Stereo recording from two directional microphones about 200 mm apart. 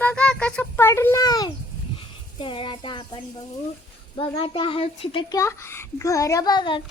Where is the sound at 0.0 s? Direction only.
5° left (ahead or behind); by 3.2 s 25° left (ahead or behind).